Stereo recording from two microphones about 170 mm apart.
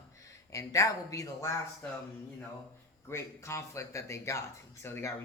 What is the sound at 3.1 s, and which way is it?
Speech, 15° left (ahead or behind).